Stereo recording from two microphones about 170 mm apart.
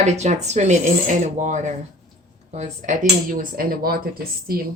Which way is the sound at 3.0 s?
55° right (ahead or behind).